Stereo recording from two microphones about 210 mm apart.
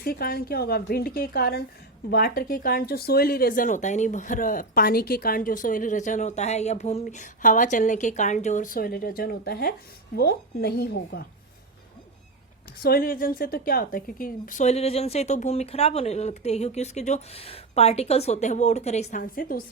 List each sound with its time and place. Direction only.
0.0 s speech: 45° left (ahead or behind)
12.8 s speech: 45° left (ahead or behind)